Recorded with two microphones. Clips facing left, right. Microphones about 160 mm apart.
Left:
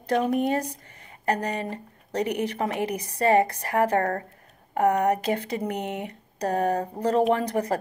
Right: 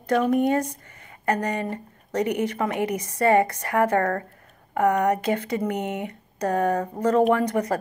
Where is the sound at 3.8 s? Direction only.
35° left (ahead or behind).